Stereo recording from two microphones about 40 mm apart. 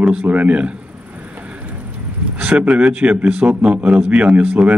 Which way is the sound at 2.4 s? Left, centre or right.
Right.